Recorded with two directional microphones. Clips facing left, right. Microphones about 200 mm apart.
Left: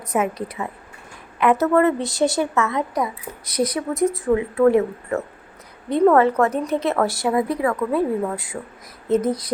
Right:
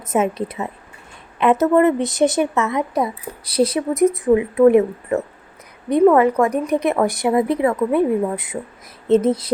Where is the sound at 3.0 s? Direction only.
30° right (ahead or behind).